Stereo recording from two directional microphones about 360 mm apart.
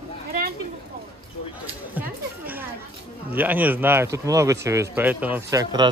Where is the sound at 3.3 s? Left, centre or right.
Centre.